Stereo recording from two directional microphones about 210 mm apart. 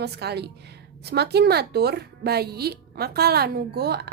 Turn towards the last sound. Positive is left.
turn(degrees=-50)  # may be behind; listen again after turning